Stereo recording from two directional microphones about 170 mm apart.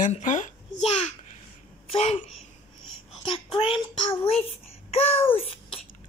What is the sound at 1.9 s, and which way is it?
Speech, 40° left (ahead or behind).